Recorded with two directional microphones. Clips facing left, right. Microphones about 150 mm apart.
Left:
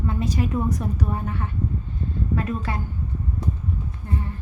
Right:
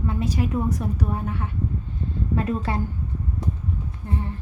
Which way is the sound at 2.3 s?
25° right (ahead or behind).